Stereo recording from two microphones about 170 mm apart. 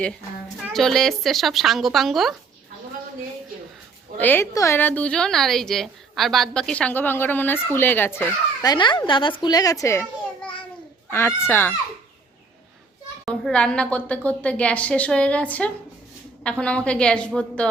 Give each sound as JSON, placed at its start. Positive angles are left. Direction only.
{"t": 0.7, "sound": "speech", "side_deg": 0}
{"t": 4.2, "sound": "a woman's voice", "side_deg": 10}
{"t": 8.6, "sound": "a woman's voice", "side_deg": 25}
{"t": 11.1, "sound": "a woman's voice", "side_deg": 15}
{"t": 13.2, "sound": "a woman's voice", "side_deg": 5}